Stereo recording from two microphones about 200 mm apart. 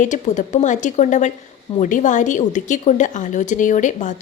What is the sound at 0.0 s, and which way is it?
A woman's voice, 40° left (ahead or behind).